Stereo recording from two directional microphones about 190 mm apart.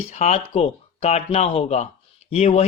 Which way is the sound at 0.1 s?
35° left (ahead or behind).